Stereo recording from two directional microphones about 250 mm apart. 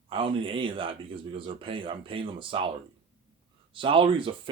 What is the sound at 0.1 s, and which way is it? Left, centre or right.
Speech, right.